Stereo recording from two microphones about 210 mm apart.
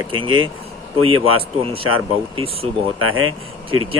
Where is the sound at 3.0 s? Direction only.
80° right.